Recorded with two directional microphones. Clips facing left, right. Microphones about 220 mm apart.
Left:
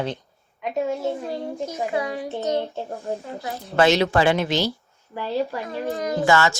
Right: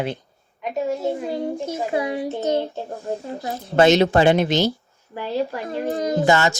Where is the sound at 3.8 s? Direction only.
20° right (ahead or behind).